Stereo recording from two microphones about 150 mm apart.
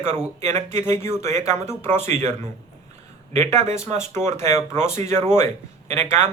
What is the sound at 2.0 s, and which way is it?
Speech, 50° right (ahead or behind).